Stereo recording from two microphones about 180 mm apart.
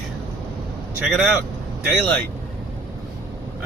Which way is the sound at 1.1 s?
5° right (ahead or behind).